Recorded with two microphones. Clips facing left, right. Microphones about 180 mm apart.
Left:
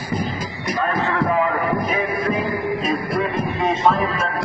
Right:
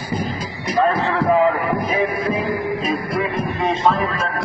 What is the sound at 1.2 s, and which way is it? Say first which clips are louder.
Music: right 5 dB; 30° right (ahead or behind).